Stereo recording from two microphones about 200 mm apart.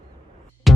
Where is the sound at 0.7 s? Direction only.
Centre (ahead or behind).